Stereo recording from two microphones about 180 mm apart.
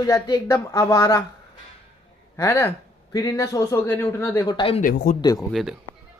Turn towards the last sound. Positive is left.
turn(degrees=0)  # may be behind; listen again after turning